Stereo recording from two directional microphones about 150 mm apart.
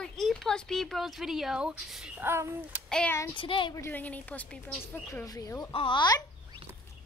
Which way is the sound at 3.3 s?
35° left (ahead or behind).